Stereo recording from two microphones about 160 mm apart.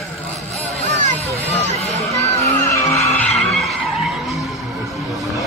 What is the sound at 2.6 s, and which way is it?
Vehicle, 15° left (ahead or behind).